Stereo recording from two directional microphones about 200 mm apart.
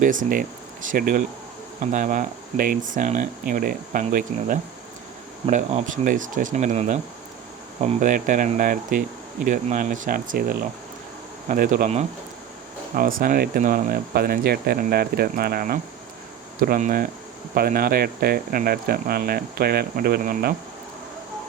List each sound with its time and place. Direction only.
0.0 s speech: 40° right (ahead or behind)